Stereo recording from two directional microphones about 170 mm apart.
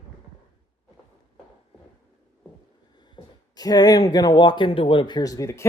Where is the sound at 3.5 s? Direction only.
25° left (ahead or behind).